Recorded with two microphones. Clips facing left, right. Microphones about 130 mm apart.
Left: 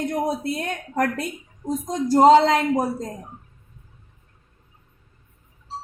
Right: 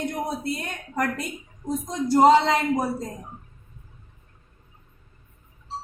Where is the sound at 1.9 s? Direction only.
40° left (ahead or behind).